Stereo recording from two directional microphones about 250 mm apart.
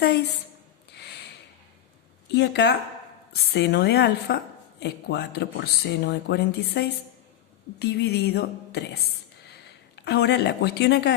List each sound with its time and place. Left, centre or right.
2.3 s a woman's voice: left